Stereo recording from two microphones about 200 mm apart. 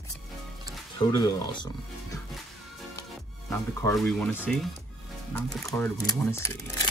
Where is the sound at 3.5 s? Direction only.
15° left (ahead or behind).